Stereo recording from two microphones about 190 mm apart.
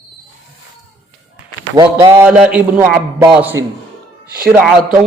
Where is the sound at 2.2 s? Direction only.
5° right (ahead or behind).